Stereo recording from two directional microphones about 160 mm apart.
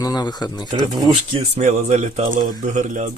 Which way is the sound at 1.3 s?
45° right (ahead or behind).